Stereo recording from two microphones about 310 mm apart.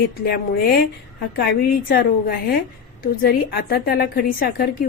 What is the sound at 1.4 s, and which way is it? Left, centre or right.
Speech, left.